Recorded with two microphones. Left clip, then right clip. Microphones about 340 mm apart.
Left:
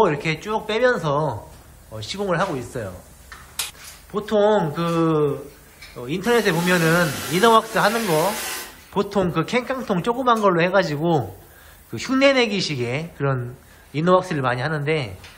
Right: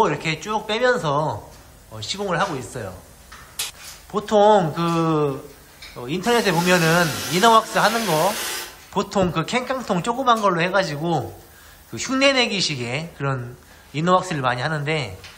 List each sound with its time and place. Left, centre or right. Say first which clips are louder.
0.0 s speech: left 1 dB; centre
4.1 s speech: right 3 dB; centre